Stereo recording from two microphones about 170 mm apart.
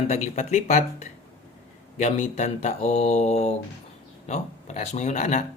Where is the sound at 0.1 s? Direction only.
45° left (ahead or behind).